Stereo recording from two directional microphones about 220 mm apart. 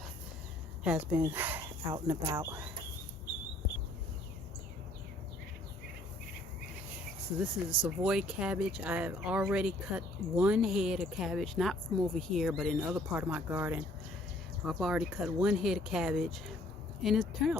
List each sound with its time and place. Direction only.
0.9 s speech: 10° right (ahead or behind)
1.9 s speech: 20° right (ahead or behind)
2.4 s speech: 10° right (ahead or behind)
7.3 s speech: 5° right (ahead or behind)